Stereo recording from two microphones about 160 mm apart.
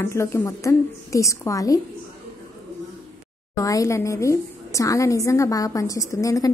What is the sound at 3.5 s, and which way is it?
A woman's voice, 20° left (ahead or behind).